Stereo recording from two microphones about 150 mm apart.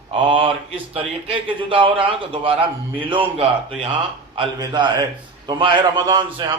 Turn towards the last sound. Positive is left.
turn(degrees=-30)  # may be behind; listen again after turning